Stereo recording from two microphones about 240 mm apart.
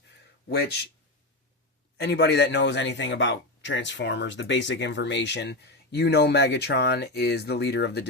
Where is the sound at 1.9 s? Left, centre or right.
Left.